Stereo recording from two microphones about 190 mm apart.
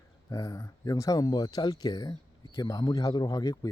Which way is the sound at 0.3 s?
15° left (ahead or behind).